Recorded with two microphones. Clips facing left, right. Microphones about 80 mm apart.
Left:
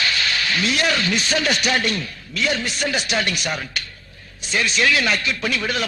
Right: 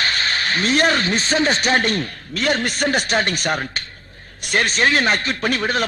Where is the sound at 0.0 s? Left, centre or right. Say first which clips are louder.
Right 1 dB; right.